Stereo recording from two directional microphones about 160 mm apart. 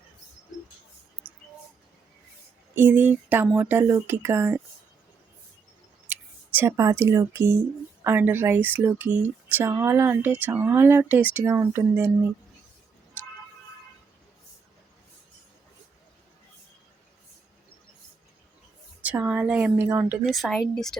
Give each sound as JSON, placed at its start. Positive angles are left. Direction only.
{"t": 2.7, "sound": "speech", "side_deg": -10}
{"t": 6.1, "sound": "speech", "side_deg": -10}
{"t": 19.0, "sound": "speech", "side_deg": -10}